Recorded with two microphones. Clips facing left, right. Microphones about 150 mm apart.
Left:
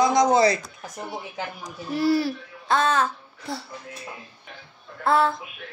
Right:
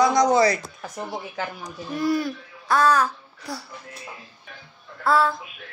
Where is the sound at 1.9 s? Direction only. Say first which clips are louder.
Left 2 dB; 30° left (ahead or behind).